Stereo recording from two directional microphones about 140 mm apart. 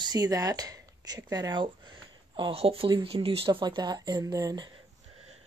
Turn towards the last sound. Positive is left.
turn(degrees=-25)  # may be behind; listen again after turning